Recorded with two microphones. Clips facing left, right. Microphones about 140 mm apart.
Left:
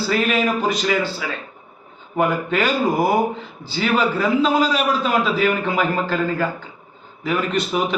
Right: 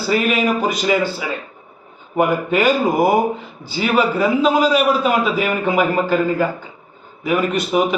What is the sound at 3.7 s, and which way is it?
A man's voice, 5° right (ahead or behind).